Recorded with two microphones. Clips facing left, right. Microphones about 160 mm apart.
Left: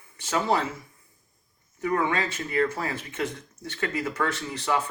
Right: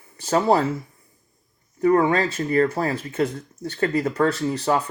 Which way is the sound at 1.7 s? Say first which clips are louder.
Right 8 dB; 35° right (ahead or behind).